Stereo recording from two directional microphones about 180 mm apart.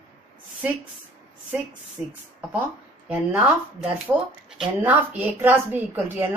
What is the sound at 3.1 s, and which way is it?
Speech, 10° right (ahead or behind).